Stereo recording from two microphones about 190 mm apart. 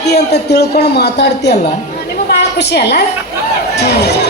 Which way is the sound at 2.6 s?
60° left (ahead or behind).